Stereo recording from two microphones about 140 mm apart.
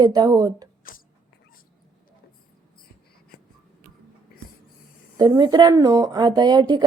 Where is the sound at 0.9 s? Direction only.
90° left.